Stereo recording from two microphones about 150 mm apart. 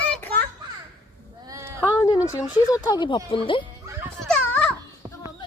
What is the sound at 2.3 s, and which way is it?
A woman's voice, 25° left (ahead or behind).